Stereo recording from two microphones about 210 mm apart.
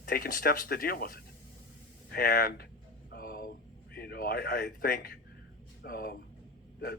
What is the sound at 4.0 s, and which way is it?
Speech, 45° left (ahead or behind).